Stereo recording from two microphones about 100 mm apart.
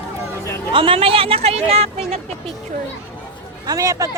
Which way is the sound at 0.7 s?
60° right (ahead or behind).